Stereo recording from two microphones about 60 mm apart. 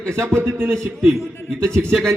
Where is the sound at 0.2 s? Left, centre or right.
Right.